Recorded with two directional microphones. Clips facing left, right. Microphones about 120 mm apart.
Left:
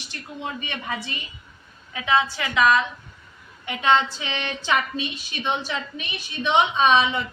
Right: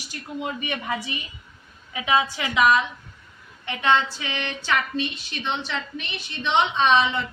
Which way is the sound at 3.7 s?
15° left (ahead or behind).